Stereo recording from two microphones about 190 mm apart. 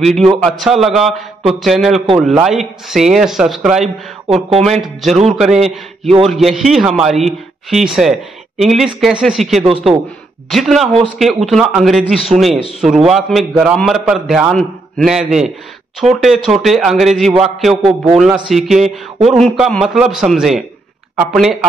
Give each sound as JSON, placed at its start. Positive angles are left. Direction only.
{"t": 0.0, "sound": "a man's voice", "side_deg": 0}
{"t": 4.3, "sound": "speech", "side_deg": -30}
{"t": 5.3, "sound": "a man's voice", "side_deg": -5}